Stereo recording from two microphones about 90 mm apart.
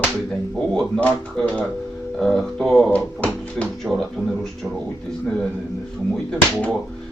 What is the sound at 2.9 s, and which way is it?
Music, 15° left (ahead or behind).